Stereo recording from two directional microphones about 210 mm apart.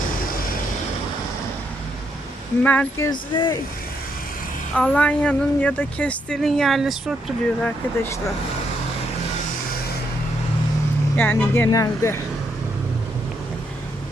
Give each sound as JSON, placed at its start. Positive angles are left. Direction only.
{"t": 2.6, "sound": "speech", "side_deg": 10}
{"t": 3.1, "sound": "speech", "side_deg": 20}
{"t": 4.7, "sound": "a woman's voice", "side_deg": 5}
{"t": 11.2, "sound": "speech", "side_deg": 10}